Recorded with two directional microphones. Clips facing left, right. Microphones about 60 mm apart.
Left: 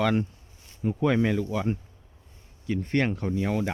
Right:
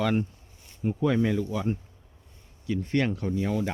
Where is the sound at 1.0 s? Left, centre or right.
Left.